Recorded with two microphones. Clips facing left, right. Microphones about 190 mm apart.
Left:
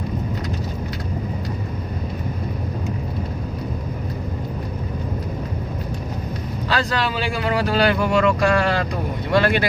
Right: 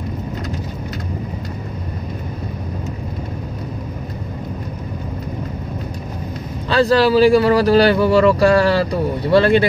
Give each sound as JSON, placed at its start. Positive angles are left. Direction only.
{"t": 6.7, "sound": "speech", "side_deg": -35}